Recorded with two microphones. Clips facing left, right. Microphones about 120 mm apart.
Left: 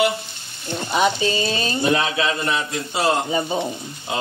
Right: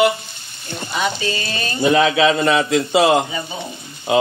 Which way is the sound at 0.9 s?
25° left (ahead or behind).